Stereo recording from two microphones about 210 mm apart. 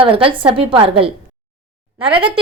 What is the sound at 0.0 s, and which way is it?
A woman's voice, 25° right (ahead or behind).